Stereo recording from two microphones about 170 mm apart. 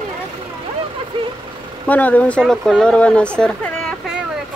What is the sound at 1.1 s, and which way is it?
Vehicle, 30° right (ahead or behind).